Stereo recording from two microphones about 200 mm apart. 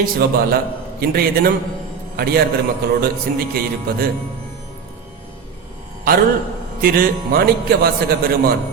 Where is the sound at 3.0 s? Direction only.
50° right (ahead or behind).